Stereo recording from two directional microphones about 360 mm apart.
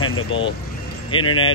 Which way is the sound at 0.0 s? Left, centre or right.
Left.